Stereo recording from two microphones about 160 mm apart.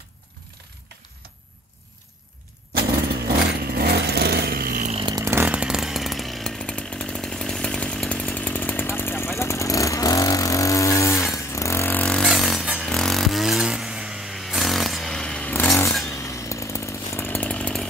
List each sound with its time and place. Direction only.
3.3 s vehicle: 80° right
4.8 s chainsaw: 35° right (ahead or behind)
5.1 s chainsaw: 15° right (ahead or behind); by 9.3 s 15° left (ahead or behind)
9.4 s vehicle: 20° left (ahead or behind)
11.3 s music: 20° left (ahead or behind)
16.1 s chainsaw: 20° left (ahead or behind)